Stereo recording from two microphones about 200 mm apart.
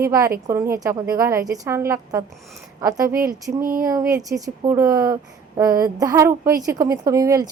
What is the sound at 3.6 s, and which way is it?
Speech, 45° right (ahead or behind).